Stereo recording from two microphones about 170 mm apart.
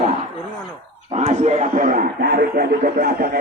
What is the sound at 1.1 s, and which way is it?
Speech, 40° right (ahead or behind).